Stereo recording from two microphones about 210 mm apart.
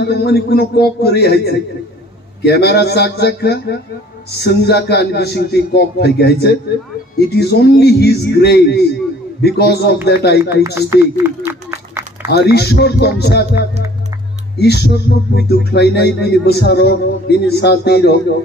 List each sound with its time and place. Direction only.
0.0 s a man's voice: 50° left (ahead or behind)
10.4 s speech: 10° right (ahead or behind)
10.9 s a sound: 15° right (ahead or behind)
12.3 s a man's voice: 50° left (ahead or behind)
14.6 s a man's voice: 50° left (ahead or behind)